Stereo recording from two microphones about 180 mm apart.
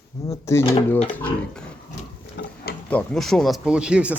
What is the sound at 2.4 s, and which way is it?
Mechanisms, 70° left (ahead or behind).